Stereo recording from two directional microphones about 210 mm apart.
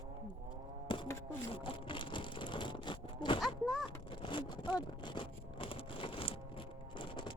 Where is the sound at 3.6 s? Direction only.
Centre (ahead or behind).